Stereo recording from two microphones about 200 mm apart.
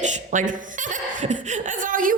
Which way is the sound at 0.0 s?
40° right (ahead or behind).